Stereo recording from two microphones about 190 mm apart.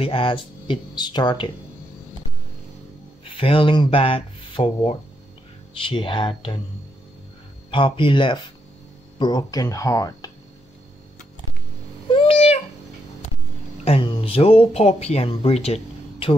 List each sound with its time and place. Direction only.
0.0 s speech: 30° left (ahead or behind)
3.3 s speech: 30° left (ahead or behind)
7.7 s speech: 25° left (ahead or behind)
12.1 s babbling: 30° left (ahead or behind)
13.8 s speech: 30° left (ahead or behind)